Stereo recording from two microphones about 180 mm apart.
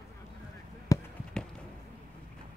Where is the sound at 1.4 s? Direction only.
5° left (ahead or behind).